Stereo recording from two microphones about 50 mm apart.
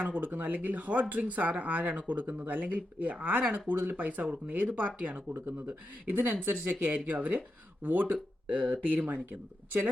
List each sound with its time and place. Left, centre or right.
0.0 s speech: right